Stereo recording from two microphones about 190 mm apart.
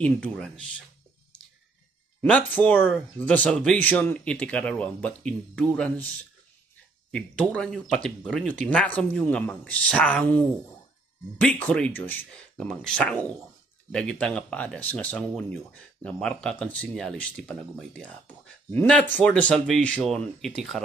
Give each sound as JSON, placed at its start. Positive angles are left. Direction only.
{"t": 0.0, "sound": "speech", "side_deg": 5}
{"t": 2.2, "sound": "speech", "side_deg": 10}
{"t": 7.1, "sound": "speech", "side_deg": 5}